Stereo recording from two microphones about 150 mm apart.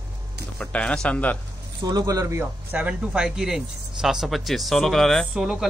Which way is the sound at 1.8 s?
25° right (ahead or behind).